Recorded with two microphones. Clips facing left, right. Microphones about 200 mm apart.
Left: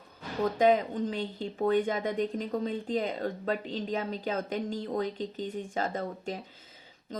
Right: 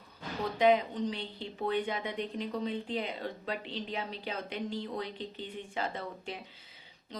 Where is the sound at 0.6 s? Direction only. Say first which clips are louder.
Left 1 dB; 45° left (ahead or behind).